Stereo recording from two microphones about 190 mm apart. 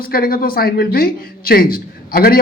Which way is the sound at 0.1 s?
50° left (ahead or behind).